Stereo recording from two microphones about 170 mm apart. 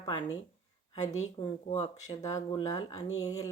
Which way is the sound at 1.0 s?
40° left (ahead or behind).